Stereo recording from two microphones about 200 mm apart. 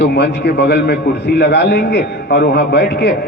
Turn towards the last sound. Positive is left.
turn(degrees=55)  # may be behind; listen again after turning